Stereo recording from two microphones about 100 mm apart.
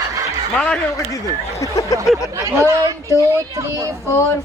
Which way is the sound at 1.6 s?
30° left (ahead or behind).